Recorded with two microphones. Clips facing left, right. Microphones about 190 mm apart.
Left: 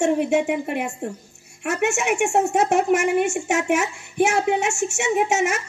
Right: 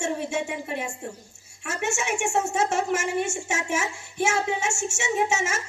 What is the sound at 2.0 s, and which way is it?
A woman's voice, 15° left (ahead or behind).